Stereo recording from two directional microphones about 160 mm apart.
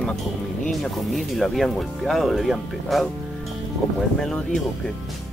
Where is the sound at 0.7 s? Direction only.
Centre (ahead or behind).